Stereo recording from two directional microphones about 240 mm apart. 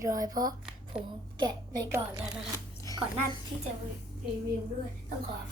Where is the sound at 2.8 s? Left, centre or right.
Centre.